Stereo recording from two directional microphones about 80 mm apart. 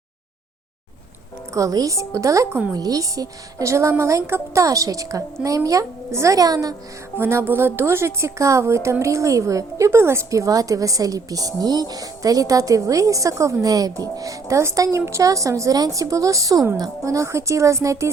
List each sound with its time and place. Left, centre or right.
1.5 s a woman's voice: right
7.2 s a woman's voice: right